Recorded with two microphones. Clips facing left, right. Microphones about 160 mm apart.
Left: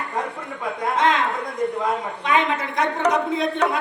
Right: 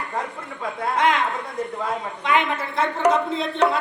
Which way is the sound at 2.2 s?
20° left (ahead or behind).